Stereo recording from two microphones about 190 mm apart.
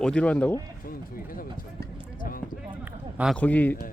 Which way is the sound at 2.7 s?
10° right (ahead or behind).